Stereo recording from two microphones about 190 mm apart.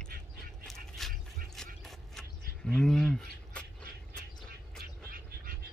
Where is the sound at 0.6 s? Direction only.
Centre (ahead or behind).